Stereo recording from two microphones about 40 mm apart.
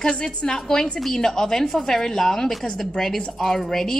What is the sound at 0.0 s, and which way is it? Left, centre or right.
A woman's voice, left.